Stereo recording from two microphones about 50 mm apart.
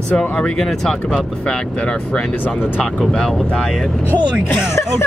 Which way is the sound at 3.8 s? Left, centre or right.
Centre.